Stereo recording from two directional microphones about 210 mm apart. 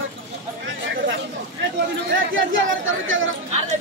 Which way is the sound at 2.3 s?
65° right (ahead or behind).